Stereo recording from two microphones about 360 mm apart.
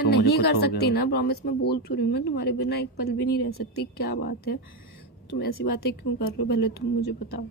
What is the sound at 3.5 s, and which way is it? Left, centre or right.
Speech, left.